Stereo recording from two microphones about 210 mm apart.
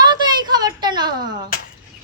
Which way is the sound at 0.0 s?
20° right (ahead or behind).